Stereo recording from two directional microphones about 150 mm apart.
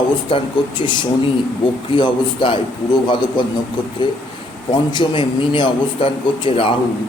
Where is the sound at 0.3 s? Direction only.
35° left (ahead or behind).